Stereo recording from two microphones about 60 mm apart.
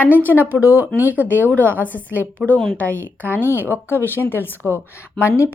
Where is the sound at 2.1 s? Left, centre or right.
Right.